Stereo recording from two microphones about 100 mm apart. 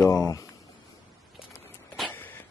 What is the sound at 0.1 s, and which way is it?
Speech, 35° left (ahead or behind).